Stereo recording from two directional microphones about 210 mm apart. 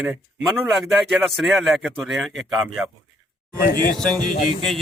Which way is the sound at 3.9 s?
5° left (ahead or behind).